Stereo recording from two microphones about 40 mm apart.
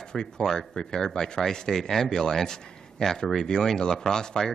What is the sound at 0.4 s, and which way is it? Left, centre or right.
Speech, centre.